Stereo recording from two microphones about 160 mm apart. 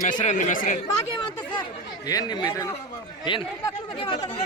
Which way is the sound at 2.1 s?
25° left (ahead or behind).